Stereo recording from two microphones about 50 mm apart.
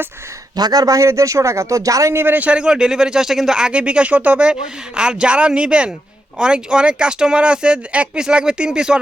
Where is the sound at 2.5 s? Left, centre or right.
Centre.